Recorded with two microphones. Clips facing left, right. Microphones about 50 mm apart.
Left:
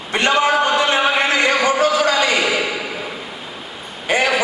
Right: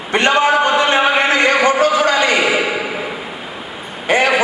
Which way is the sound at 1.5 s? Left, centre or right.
Right.